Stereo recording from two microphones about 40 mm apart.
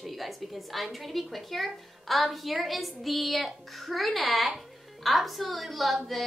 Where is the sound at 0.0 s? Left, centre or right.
Centre.